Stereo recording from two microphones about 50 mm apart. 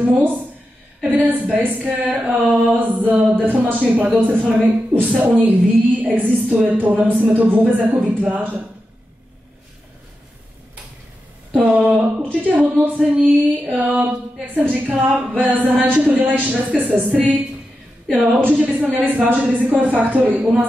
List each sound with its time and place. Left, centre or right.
0.0 s speech: right
11.6 s speech: right